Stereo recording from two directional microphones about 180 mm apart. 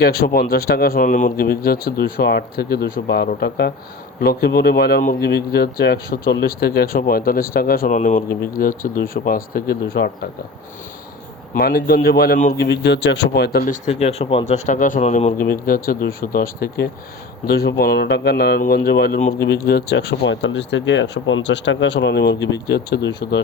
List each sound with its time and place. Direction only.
0.0 s speech: 60° left (ahead or behind)
11.5 s speech: 60° left (ahead or behind)
12.6 s speech: 75° left (ahead or behind)
13.8 s speech: 35° left (ahead or behind)
15.4 s speech: 55° left (ahead or behind); by 23.4 s 70° left (ahead or behind)